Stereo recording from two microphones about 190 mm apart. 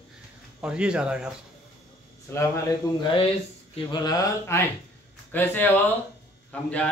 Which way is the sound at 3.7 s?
20° left (ahead or behind).